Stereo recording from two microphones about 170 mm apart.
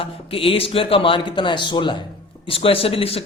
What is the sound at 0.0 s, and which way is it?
A man's voice, 35° left (ahead or behind).